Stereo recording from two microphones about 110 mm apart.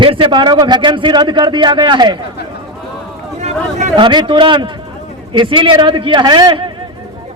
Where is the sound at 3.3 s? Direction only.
90° right.